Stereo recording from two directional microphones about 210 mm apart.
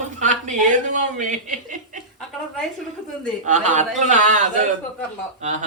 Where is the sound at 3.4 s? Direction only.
35° right (ahead or behind).